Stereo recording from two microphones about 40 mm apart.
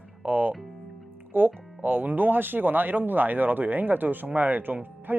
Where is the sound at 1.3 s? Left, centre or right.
Right.